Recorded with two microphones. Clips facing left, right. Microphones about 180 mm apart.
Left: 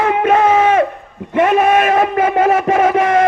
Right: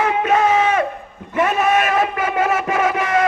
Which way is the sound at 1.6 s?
50° left (ahead or behind).